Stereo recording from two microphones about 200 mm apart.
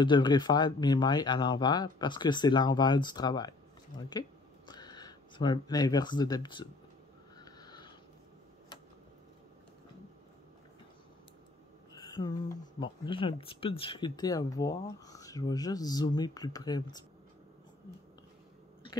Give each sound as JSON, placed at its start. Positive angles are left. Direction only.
{"t": 0.0, "sound": "speech", "side_deg": 25}
{"t": 4.1, "sound": "a sound", "side_deg": 20}
{"t": 11.9, "sound": "speech", "side_deg": 20}